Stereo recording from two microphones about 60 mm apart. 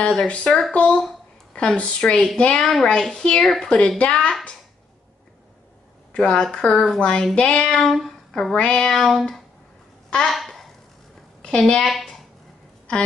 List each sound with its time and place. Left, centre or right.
0.0 s speech: centre
2.6 s a woman's voice: centre
6.1 s speech: centre
10.2 s a sound: centre
11.4 s a woman's voice: centre
12.0 s a sound: centre